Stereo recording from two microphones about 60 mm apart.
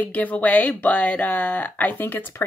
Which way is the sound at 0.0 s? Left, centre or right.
Left.